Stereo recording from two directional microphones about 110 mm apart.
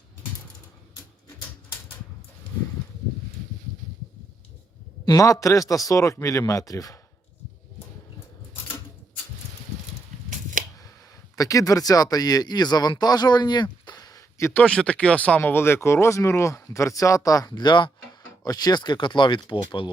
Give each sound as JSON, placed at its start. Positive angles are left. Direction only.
{"t": 5.0, "sound": "speech", "side_deg": 30}
{"t": 11.3, "sound": "speech", "side_deg": 30}
{"t": 14.6, "sound": "speech", "side_deg": 10}